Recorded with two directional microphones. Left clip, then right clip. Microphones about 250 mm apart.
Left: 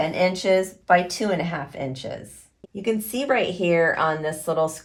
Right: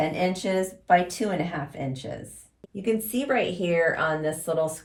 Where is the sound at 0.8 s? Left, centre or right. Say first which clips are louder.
Even; left.